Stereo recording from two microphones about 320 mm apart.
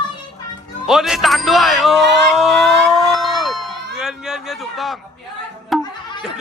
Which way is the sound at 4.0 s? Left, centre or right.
Centre.